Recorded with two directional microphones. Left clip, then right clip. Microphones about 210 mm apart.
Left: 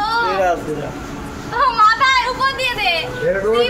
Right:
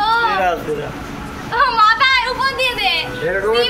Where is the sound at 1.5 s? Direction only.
35° right (ahead or behind).